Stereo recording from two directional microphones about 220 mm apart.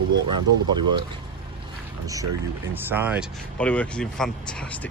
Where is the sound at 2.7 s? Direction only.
10° right (ahead or behind).